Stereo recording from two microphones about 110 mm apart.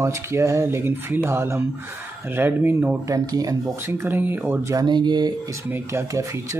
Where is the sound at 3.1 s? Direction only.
35° right (ahead or behind).